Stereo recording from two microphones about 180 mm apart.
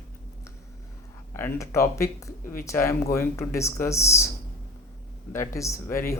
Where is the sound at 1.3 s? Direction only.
15° left (ahead or behind).